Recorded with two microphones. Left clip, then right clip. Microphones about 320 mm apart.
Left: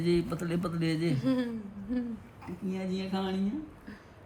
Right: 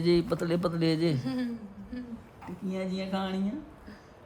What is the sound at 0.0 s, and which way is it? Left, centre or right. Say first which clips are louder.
Speech: right 4 dB; right.